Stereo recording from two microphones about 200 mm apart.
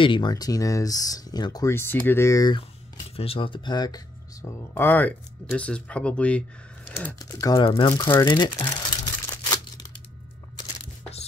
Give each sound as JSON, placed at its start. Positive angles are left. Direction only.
{"t": 0.0, "sound": "speech", "side_deg": 25}